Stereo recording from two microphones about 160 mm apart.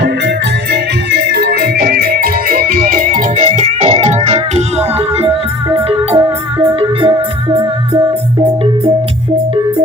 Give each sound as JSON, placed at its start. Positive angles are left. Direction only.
{"t": 1.3, "sound": "music", "side_deg": -85}